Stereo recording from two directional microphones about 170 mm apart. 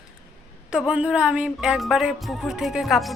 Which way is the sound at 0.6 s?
5° right (ahead or behind).